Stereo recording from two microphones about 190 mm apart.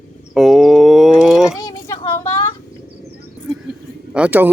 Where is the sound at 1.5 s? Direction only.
15° left (ahead or behind).